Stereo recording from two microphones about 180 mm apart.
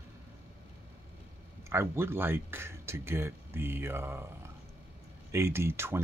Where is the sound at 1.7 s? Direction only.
15° right (ahead or behind).